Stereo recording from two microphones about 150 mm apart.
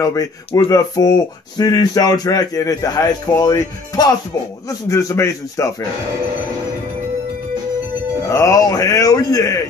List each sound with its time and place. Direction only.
0.0 s speech: 20° left (ahead or behind)
8.3 s speech: 20° left (ahead or behind)